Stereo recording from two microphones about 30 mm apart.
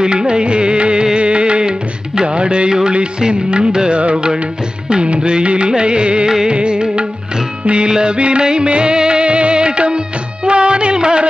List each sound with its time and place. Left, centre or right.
0.0 s music: right